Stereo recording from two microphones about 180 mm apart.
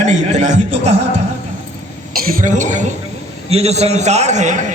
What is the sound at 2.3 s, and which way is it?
A man's voice, 50° right (ahead or behind).